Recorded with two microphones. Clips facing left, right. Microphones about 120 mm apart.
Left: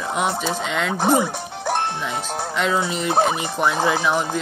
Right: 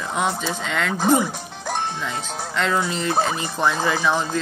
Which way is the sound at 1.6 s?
60° left (ahead or behind).